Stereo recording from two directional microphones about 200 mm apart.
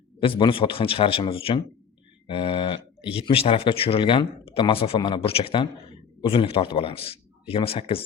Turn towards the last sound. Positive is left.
turn(degrees=30)  # may be behind; listen again after turning